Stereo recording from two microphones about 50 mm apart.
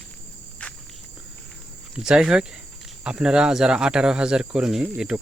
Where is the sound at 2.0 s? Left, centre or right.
Centre.